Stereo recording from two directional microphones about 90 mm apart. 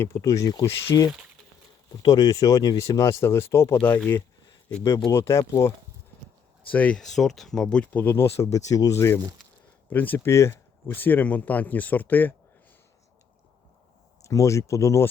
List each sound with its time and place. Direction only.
0.2 s speech: 40° left (ahead or behind)
3.8 s speech: 20° left (ahead or behind)
5.1 s speech: 30° left (ahead or behind)
6.7 s speech: 15° left (ahead or behind)
7.0 s speech: 5° left (ahead or behind); by 9.0 s 40° left (ahead or behind)
9.0 s speech: 25° left (ahead or behind)
10.2 s speech: 30° left (ahead or behind)
14.3 s speech: 35° left (ahead or behind)